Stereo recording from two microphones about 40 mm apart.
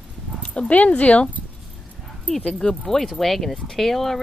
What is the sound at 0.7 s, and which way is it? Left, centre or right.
Speech, left.